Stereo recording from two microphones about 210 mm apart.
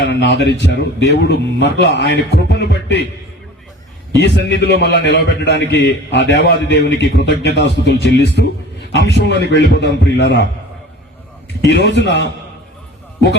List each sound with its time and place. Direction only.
0.0 s a man's voice: 55° left (ahead or behind)
4.4 s a man's voice: 55° left (ahead or behind)
11.6 s a man's voice: 55° left (ahead or behind)